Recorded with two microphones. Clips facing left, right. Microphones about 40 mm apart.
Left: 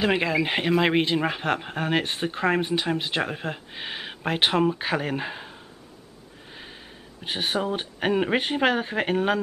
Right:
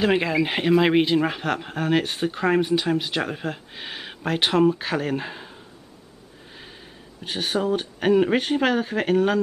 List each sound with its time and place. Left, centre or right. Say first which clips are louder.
0.0 s speech: right 2 dB; centre
7.2 s speech: right 2 dB; centre